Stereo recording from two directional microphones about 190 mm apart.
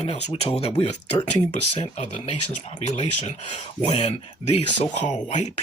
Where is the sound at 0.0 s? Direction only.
35° left (ahead or behind).